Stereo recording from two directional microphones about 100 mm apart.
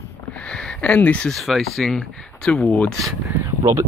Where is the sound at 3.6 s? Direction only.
40° right (ahead or behind).